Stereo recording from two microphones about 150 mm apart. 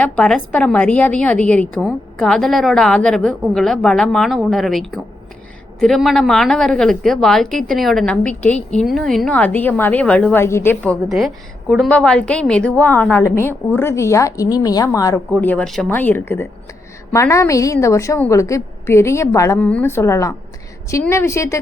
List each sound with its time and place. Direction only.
0.0 s a woman's voice: 5° left (ahead or behind); by 15.2 s 25° left (ahead or behind)
15.3 s a woman's voice: 10° left (ahead or behind)